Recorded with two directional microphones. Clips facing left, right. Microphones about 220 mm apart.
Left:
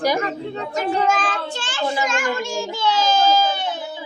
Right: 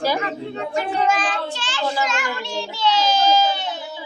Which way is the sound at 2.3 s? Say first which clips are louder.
Left 4 dB; 45° left (ahead or behind).